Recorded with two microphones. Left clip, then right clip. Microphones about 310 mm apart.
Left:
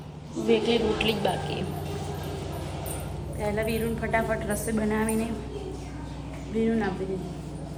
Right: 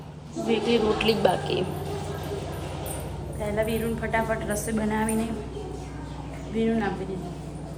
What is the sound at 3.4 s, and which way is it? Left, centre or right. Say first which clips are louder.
A woman's voice: right 1 dB; centre.